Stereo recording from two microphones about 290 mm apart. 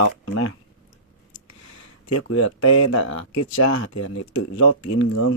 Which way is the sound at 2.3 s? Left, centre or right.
Left.